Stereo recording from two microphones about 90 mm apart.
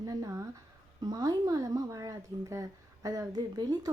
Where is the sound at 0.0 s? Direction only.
40° right (ahead or behind).